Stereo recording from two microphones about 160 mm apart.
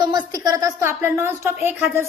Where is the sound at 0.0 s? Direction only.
25° right (ahead or behind).